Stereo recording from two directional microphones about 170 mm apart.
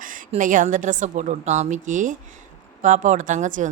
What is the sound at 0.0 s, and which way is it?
Speech, 50° right (ahead or behind).